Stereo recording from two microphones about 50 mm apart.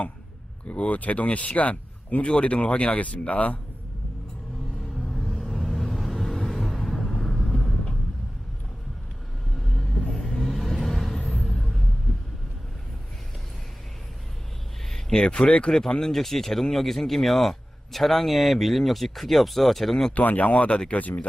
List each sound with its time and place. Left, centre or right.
0.7 s speech: left
4.9 s vehicle: centre
9.6 s vehicle: centre
14.8 s a sound: centre
15.2 s speech: left
15.7 s speech: centre
20.1 s speech: left
21.0 s speech: left